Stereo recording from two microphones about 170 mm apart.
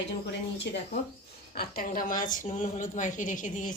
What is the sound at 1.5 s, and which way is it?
A woman's voice, 60° left (ahead or behind).